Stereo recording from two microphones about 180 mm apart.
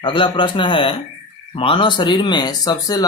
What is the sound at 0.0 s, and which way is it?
Speech, 25° left (ahead or behind).